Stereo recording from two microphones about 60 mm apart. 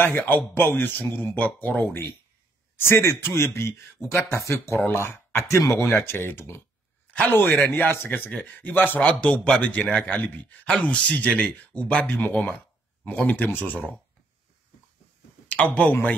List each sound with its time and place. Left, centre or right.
0.0 s speech: left
15.4 s speech: left